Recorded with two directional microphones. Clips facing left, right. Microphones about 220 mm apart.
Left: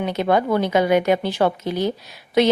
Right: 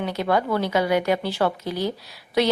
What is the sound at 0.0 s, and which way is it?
A woman's voice, 20° left (ahead or behind).